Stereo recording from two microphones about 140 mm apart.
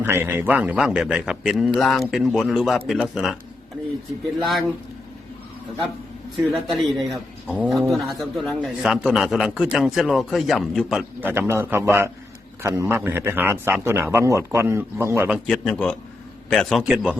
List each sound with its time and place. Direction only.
0.0 s a man's voice: 15° right (ahead or behind)
4.4 s a man's voice: centre (ahead or behind)
6.5 s a man's voice: centre (ahead or behind)
11.2 s a man's voice: 15° right (ahead or behind)
15.4 s a man's voice: 5° left (ahead or behind)